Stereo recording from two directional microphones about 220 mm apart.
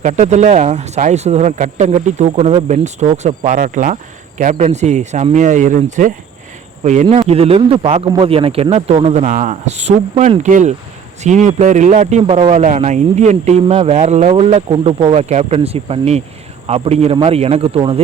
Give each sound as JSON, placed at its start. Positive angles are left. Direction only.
{"t": 0.0, "sound": "a man's voice", "side_deg": -35}